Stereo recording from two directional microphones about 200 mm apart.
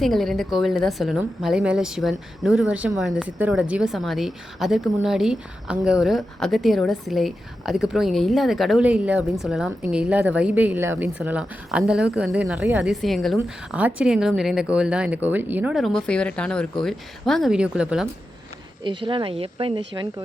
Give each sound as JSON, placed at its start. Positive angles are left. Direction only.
{"t": 0.0, "sound": "a woman's voice", "side_deg": 0}
{"t": 18.8, "sound": "speech", "side_deg": -25}